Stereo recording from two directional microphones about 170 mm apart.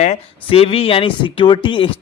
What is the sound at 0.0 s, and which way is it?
Speech, 40° left (ahead or behind).